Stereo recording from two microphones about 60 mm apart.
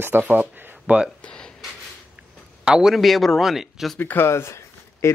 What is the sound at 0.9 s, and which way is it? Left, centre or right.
Speech, right.